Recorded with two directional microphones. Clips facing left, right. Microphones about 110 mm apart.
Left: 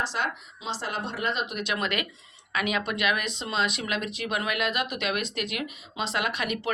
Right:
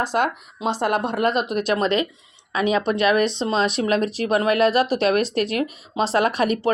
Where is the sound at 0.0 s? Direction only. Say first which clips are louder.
Right 8 dB; 50° right (ahead or behind).